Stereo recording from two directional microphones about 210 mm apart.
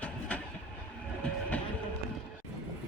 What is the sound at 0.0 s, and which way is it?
Train, 5° left (ahead or behind).